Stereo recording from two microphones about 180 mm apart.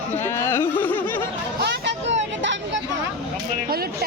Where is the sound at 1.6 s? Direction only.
70° right (ahead or behind).